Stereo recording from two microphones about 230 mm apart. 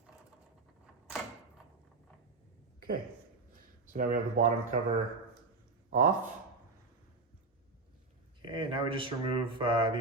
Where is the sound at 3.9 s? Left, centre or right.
Right.